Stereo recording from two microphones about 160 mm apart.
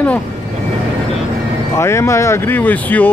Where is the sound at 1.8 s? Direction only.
15° left (ahead or behind).